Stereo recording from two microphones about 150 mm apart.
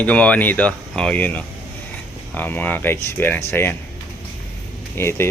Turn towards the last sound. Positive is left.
turn(degrees=15)  # may be behind; listen again after turning